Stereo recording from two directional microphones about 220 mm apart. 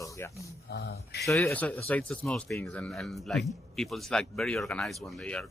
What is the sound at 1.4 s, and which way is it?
A man's voice, 5° left (ahead or behind).